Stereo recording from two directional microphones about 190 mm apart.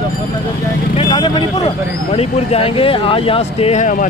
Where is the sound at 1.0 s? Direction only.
25° left (ahead or behind).